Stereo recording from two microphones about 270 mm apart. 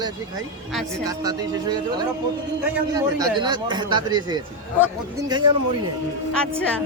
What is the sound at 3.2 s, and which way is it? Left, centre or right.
Speech, centre.